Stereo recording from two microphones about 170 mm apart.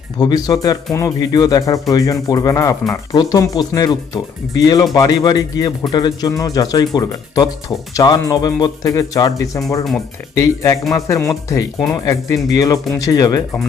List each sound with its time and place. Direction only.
0.2 s speech: 25° left (ahead or behind)